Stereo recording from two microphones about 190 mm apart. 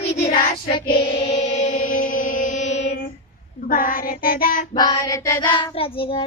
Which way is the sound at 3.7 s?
45° left (ahead or behind).